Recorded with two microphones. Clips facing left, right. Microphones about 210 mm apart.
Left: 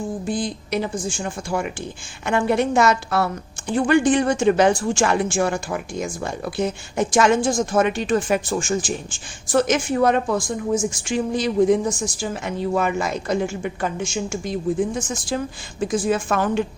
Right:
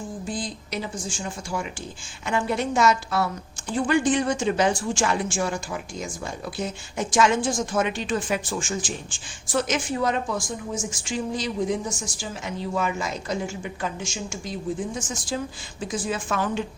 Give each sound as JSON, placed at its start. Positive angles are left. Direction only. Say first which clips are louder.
{"t": 0.3, "sound": "a woman's voice", "louder": "left 6 dB", "side_deg": 60}